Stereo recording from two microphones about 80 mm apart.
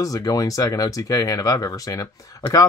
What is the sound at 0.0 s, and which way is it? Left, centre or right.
Speech, left.